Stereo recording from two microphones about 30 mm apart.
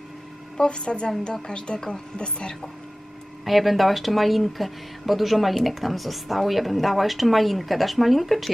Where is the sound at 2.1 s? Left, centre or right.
Left.